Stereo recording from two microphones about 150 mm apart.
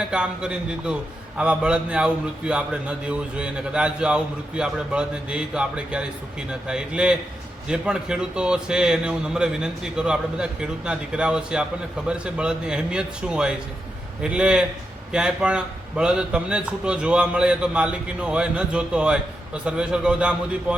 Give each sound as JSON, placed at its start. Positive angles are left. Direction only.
{"t": 0.1, "sound": "a man's voice", "side_deg": -5}